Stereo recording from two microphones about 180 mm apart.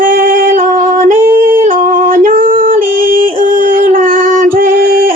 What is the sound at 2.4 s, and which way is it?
Female singing, 30° right (ahead or behind).